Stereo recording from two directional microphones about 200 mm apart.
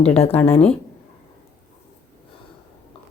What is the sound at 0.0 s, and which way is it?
Speech, 30° left (ahead or behind).